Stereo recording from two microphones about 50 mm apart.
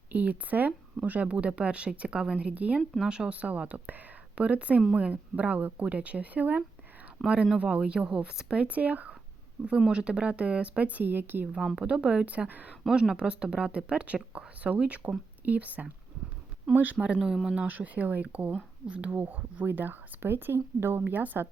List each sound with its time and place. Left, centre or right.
0.1 s speech: right; by 3.3 s centre
3.3 s speech: right
7.2 s speech: centre
7.6 s speech: right
8.6 s speech: right
9.6 s speech: centre; by 11.4 s right
11.8 s speech: right
12.9 s speech: centre; by 17.0 s right
17.2 s speech: centre
17.7 s speech: right